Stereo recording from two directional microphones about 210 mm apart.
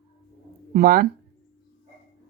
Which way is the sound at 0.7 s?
45° right (ahead or behind).